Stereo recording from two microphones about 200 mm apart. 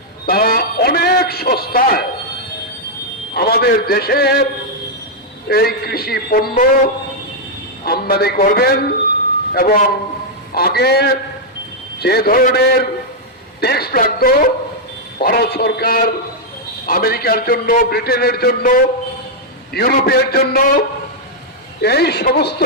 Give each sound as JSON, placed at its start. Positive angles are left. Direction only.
{"t": 0.3, "sound": "a sound", "side_deg": 50}
{"t": 3.3, "sound": "a man's voice", "side_deg": 50}
{"t": 5.5, "sound": "a man's voice", "side_deg": 50}
{"t": 7.9, "sound": "a man's voice", "side_deg": 50}
{"t": 21.8, "sound": "a man's voice", "side_deg": 55}